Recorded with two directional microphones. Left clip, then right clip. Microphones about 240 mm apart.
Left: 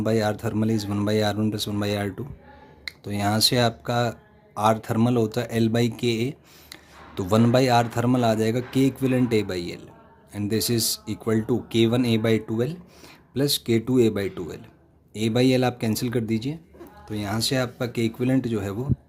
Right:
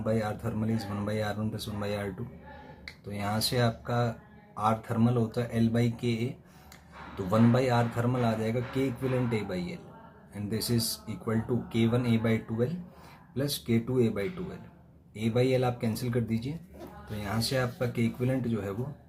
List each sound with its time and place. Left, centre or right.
0.0 s speech: left
7.3 s speech: left